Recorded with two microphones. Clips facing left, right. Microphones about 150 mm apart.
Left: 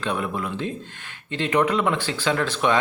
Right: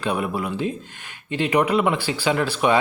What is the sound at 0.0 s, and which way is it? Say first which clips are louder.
Speech: right 2 dB; 10° right (ahead or behind).